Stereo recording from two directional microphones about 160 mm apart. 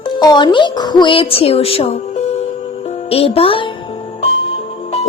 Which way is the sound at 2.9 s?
40° left (ahead or behind).